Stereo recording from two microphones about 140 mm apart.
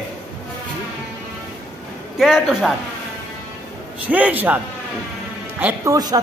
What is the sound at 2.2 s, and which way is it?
Speech, 5° right (ahead or behind).